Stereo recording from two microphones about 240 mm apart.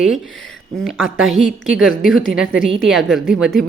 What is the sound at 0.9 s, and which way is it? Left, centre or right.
A woman's voice, centre.